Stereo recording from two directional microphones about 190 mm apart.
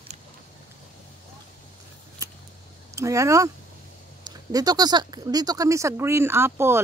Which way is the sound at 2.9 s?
15° right (ahead or behind).